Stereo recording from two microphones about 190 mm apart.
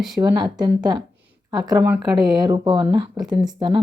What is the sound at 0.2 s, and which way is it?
Speech, 20° right (ahead or behind).